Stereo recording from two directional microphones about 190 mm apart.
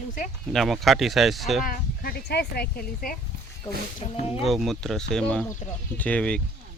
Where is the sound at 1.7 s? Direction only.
55° left (ahead or behind).